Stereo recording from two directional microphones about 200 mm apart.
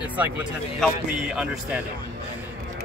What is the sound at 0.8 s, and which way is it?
A man's voice, 5° right (ahead or behind).